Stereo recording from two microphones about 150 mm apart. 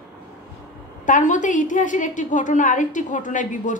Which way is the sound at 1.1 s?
60° left (ahead or behind).